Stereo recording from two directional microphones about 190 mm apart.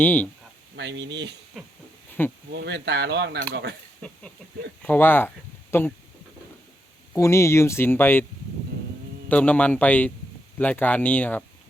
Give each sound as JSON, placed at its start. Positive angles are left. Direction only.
{"t": 0.0, "sound": "speech", "side_deg": 10}
{"t": 0.8, "sound": "speech", "side_deg": -70}
{"t": 2.5, "sound": "speech", "side_deg": -65}
{"t": 4.8, "sound": "speech", "side_deg": 10}
{"t": 7.1, "sound": "speech", "side_deg": 15}
{"t": 9.3, "sound": "speech", "side_deg": 10}